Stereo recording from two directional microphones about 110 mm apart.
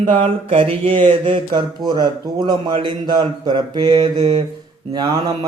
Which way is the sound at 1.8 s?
40° right (ahead or behind).